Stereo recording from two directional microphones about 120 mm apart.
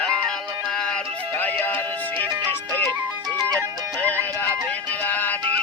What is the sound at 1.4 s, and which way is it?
Music, 15° left (ahead or behind).